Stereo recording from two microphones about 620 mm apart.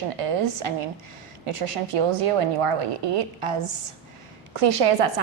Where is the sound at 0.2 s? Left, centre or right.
Right.